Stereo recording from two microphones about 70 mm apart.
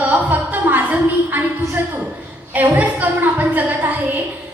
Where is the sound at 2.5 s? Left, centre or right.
Right.